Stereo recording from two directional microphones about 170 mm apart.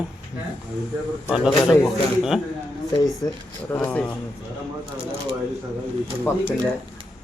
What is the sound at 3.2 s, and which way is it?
Speech, 20° left (ahead or behind).